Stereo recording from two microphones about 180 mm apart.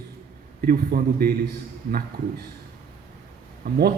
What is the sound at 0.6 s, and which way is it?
Speech, 55° right (ahead or behind).